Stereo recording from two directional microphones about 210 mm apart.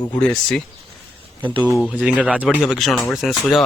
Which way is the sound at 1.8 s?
5° right (ahead or behind).